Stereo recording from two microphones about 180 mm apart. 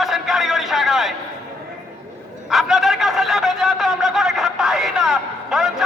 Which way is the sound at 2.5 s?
Centre (ahead or behind).